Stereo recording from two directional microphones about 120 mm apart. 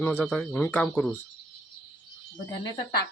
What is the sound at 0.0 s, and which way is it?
Speech, 15° left (ahead or behind).